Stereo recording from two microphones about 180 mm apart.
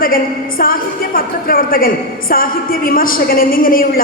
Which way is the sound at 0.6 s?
55° left (ahead or behind).